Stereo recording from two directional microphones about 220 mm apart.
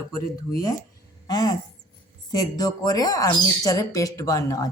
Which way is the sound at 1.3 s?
15° left (ahead or behind).